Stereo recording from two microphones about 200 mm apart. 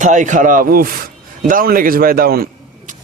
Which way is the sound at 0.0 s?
40° right (ahead or behind).